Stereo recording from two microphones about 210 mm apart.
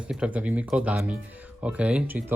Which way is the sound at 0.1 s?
5° right (ahead or behind).